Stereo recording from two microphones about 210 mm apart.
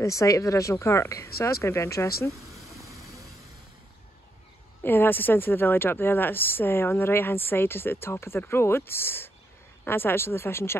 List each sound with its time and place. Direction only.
0.0 s a woman's voice: 15° left (ahead or behind)
2.8 s vehicle: 15° right (ahead or behind)
4.8 s a woman's voice: 10° left (ahead or behind)